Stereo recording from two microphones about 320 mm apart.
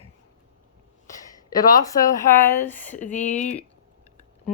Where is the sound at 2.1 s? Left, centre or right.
Centre.